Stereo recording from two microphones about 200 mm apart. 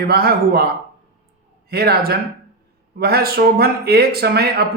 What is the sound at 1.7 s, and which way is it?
A man's voice, 50° right (ahead or behind).